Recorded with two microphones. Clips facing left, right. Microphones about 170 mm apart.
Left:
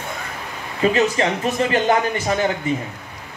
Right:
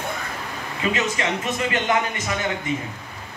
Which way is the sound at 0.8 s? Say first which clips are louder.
Left 7 dB; 35° left (ahead or behind).